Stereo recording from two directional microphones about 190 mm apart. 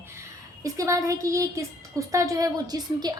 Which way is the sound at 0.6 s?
15° right (ahead or behind).